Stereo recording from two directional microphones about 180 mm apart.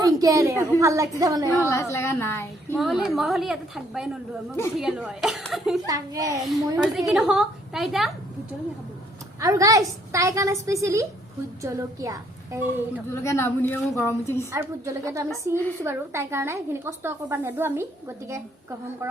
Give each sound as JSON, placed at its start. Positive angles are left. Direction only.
{"t": 0.0, "sound": "a woman's voice", "side_deg": -20}
{"t": 1.5, "sound": "a woman's voice", "side_deg": 15}
{"t": 2.7, "sound": "a woman's voice", "side_deg": 0}
{"t": 5.8, "sound": "a child's voice", "side_deg": -20}
{"t": 7.1, "sound": "a woman's voice", "side_deg": 0}
{"t": 9.4, "sound": "a woman's voice", "side_deg": -20}
{"t": 13.1, "sound": "a woman's voice", "side_deg": 15}
{"t": 14.5, "sound": "a woman's voice", "side_deg": -15}